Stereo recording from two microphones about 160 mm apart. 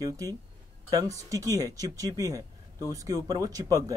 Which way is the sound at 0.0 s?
20° right (ahead or behind).